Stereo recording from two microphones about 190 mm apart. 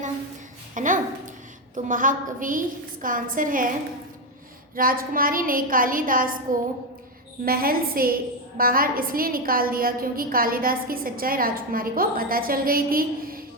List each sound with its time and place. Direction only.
0.7 s a sound: 45° right (ahead or behind)
1.7 s a woman's voice: 45° right (ahead or behind)
4.7 s a woman's voice: 50° right (ahead or behind)
7.4 s a woman's voice: 50° right (ahead or behind)